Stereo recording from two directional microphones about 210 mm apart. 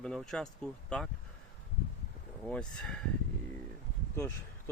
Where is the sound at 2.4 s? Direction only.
5° left (ahead or behind).